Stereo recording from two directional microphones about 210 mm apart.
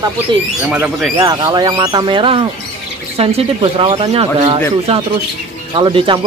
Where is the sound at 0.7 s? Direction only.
5° right (ahead or behind).